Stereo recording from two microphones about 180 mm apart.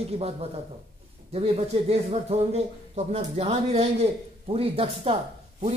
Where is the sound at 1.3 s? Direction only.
35° right (ahead or behind).